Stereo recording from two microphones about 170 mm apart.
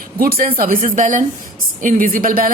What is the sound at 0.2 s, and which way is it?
A woman's voice, 60° right (ahead or behind).